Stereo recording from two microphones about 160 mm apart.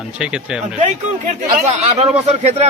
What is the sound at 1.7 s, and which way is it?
A man's voice, 40° right (ahead or behind).